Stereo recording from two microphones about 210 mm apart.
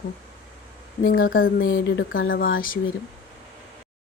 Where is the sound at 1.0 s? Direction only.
45° left (ahead or behind).